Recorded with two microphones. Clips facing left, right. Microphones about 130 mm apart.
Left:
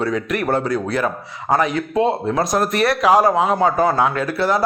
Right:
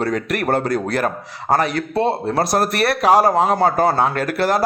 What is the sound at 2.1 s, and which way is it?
Speech, 35° right (ahead or behind).